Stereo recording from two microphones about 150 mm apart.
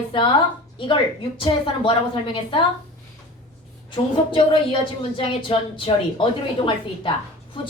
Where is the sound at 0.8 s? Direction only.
35° left (ahead or behind).